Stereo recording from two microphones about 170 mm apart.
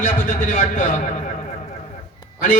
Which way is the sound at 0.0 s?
50° left (ahead or behind).